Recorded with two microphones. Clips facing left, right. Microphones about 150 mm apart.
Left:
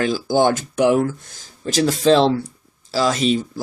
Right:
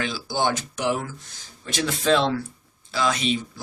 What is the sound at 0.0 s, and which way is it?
Speech, 45° left (ahead or behind).